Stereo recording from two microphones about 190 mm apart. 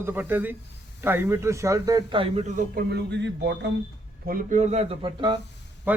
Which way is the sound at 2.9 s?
65° right (ahead or behind).